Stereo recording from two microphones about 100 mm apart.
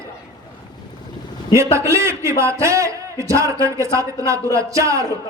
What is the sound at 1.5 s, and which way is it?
A man's voice, 30° right (ahead or behind).